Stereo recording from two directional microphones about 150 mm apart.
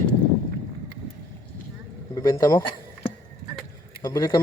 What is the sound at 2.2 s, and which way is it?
Speech, 25° left (ahead or behind).